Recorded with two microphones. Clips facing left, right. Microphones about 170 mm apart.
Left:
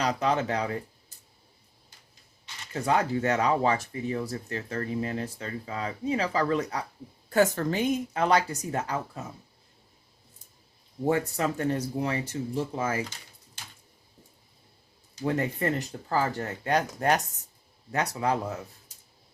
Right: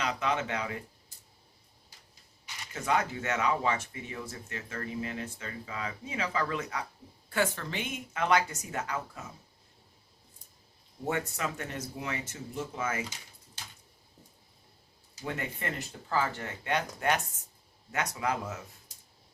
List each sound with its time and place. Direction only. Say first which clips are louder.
0.0 s speech: left 5 dB; 35° left (ahead or behind)
2.7 s speech: left 5 dB; 35° left (ahead or behind)
11.0 s speech: left 7 dB; 35° left (ahead or behind)
15.2 s speech: left 9 dB; 35° left (ahead or behind)